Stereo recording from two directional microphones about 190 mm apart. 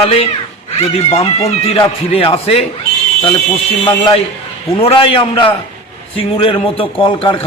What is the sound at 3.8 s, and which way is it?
A man's voice, 25° left (ahead or behind).